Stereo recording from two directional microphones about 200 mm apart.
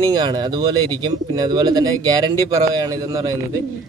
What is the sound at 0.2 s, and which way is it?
Speech, 20° right (ahead or behind).